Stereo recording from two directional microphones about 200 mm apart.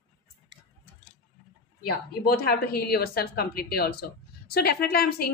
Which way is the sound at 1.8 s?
50° left (ahead or behind).